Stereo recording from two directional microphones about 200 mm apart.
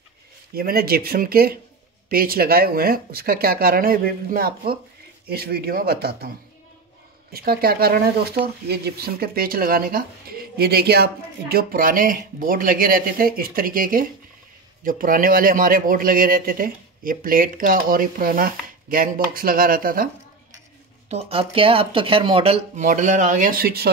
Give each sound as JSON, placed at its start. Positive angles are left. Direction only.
{"t": 0.6, "sound": "a man's voice", "side_deg": -50}
{"t": 7.3, "sound": "a man's voice", "side_deg": -50}
{"t": 21.1, "sound": "speech", "side_deg": -30}